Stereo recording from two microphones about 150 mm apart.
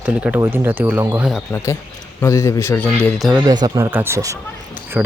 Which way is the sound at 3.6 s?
25° right (ahead or behind).